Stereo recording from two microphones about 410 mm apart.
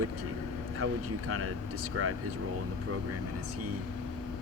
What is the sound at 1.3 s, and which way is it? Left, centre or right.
Speech, right.